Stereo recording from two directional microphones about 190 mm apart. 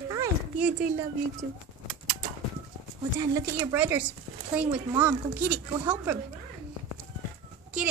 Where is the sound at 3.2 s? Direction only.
15° right (ahead or behind).